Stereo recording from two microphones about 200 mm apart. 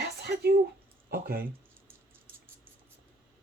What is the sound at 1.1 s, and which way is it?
Speech, 45° right (ahead or behind).